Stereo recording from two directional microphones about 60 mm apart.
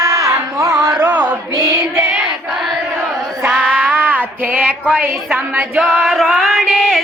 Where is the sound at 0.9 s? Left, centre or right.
Right.